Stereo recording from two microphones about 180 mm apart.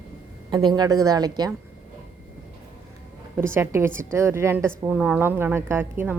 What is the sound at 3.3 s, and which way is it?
Speech, 15° right (ahead or behind).